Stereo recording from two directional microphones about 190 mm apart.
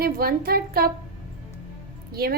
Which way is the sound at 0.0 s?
50° right (ahead or behind).